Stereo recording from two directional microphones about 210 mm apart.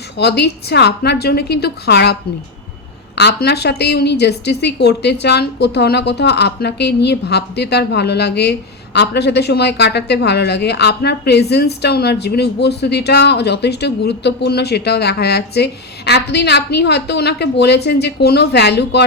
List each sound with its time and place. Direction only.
0.2 s a woman's voice: 50° left (ahead or behind)
3.2 s a woman's voice: 50° left (ahead or behind)